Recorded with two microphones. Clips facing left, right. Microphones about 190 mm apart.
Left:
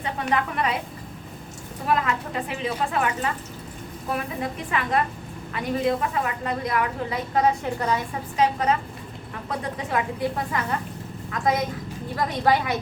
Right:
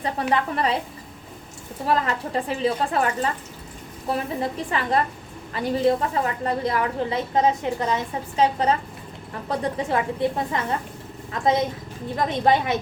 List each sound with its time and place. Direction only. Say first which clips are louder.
0.0 s a woman's voice: right 2 dB; 35° right (ahead or behind)
1.9 s a woman's voice: right 1 dB; 35° right (ahead or behind)